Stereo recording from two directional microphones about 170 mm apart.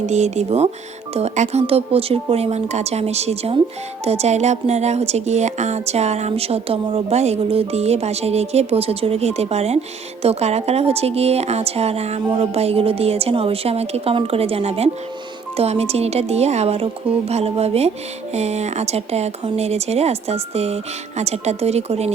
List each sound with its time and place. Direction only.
0.0 s speech: 40° right (ahead or behind)